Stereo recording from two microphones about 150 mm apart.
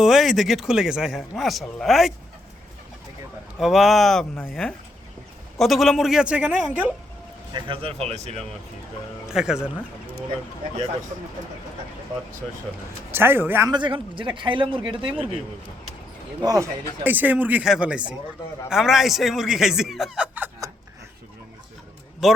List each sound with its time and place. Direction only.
0.0 s speech: centre (ahead or behind)
3.6 s speech: centre (ahead or behind)
7.5 s speech: 35° right (ahead or behind)
9.2 s speech: 5° right (ahead or behind)
13.1 s speech: 15° right (ahead or behind)
13.7 s a man's voice: 30° right (ahead or behind)
16.4 s speech: 25° right (ahead or behind)
17.0 s speech: 10° right (ahead or behind)
22.2 s speech: centre (ahead or behind)